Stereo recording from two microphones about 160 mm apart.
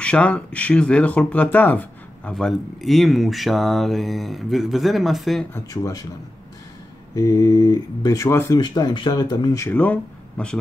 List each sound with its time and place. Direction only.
0.0 s speech: 10° left (ahead or behind)
5.5 s speech: 20° left (ahead or behind)
7.2 s speech: 20° left (ahead or behind)